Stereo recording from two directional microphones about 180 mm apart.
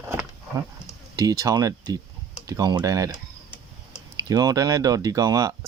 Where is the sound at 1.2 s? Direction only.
20° right (ahead or behind).